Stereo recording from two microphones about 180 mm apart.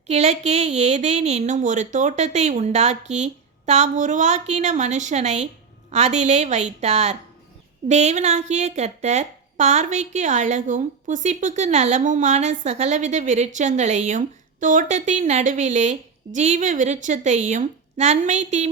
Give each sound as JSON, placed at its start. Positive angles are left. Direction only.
{"t": 0.1, "sound": "speech", "side_deg": -40}